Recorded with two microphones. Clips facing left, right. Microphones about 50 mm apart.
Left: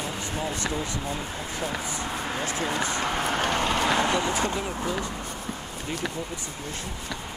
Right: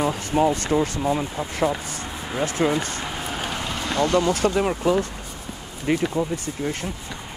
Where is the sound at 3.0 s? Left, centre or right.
Centre.